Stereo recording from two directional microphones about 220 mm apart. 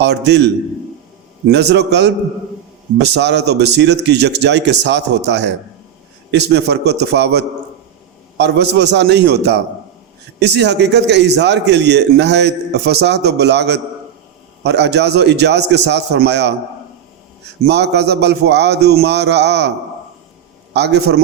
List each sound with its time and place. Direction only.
0.0 s a man's voice: 50° right (ahead or behind)
20.7 s a man's voice: 50° right (ahead or behind)